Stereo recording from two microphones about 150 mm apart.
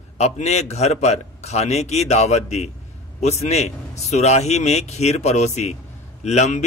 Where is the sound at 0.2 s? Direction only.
45° left (ahead or behind).